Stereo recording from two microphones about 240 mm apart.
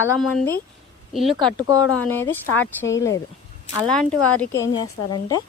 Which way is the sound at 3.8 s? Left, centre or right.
Centre.